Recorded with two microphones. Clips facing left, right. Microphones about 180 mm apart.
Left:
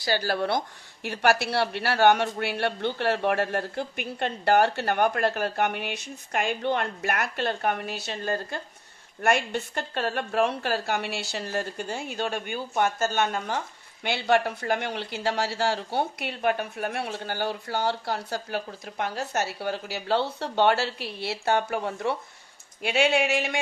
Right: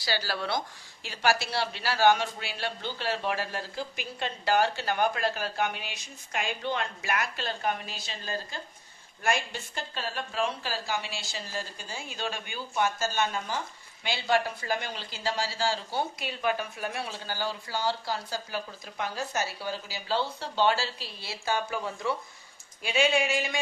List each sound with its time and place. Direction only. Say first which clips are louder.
0.0 s speech: left 6 dB; 55° left (ahead or behind)